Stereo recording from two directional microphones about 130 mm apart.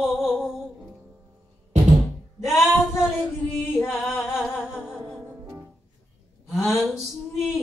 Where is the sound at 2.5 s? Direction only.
Centre (ahead or behind).